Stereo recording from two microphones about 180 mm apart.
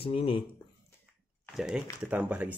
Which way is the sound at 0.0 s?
30° left (ahead or behind).